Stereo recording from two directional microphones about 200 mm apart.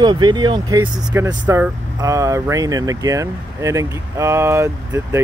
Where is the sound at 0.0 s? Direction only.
20° right (ahead or behind).